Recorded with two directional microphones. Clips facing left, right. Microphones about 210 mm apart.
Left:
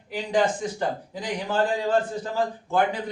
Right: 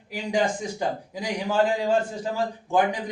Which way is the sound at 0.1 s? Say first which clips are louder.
Left 1 dB; 15° right (ahead or behind).